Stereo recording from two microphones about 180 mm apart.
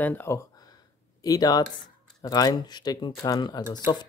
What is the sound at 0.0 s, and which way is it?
Speech, 10° left (ahead or behind).